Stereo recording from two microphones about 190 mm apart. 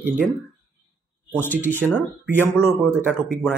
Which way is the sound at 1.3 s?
10° left (ahead or behind).